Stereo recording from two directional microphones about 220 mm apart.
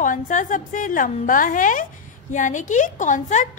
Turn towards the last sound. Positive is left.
turn(degrees=35)  # may be behind; listen again after turning